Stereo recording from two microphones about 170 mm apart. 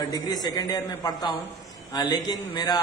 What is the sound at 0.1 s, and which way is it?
A man's voice, 20° left (ahead or behind).